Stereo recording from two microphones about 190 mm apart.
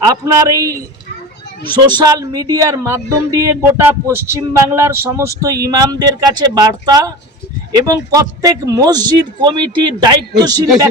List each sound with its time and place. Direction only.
0.0 s speech: 20° right (ahead or behind)
2.0 s speech: 20° right (ahead or behind)